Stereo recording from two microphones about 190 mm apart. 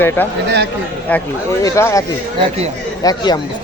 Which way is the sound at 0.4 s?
60° right (ahead or behind).